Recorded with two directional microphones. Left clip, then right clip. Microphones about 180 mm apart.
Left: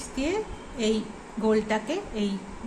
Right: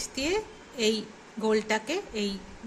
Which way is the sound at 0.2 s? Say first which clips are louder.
Left 1 dB; 55° right (ahead or behind).